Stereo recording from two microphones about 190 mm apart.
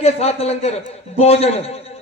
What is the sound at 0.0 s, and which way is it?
A man's voice, 30° left (ahead or behind).